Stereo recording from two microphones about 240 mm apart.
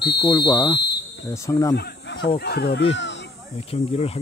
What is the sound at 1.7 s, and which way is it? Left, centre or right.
Speech, left.